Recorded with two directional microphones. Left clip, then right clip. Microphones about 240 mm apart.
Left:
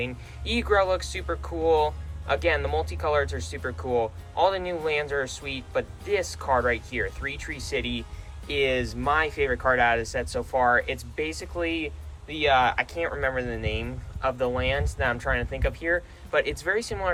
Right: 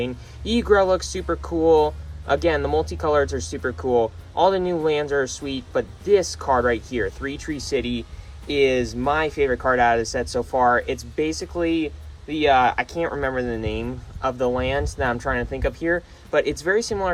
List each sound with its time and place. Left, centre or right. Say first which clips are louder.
0.0 s speech: right 4 dB; centre